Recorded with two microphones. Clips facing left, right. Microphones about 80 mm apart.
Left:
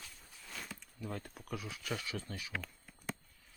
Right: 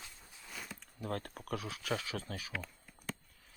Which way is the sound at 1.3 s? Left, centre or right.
Right.